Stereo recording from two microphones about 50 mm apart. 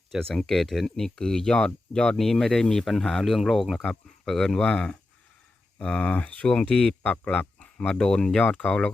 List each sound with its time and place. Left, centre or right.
0.2 s speech: centre